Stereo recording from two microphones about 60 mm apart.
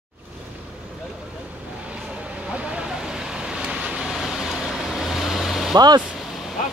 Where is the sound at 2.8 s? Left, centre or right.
Centre.